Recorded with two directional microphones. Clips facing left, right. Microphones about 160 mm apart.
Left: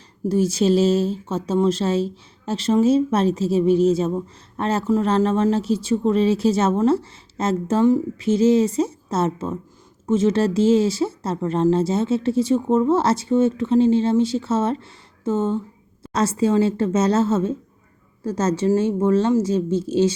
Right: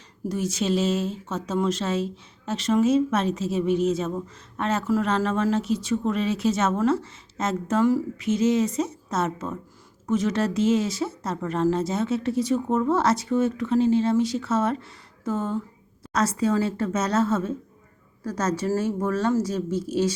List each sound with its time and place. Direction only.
0.3 s speech: 30° left (ahead or behind)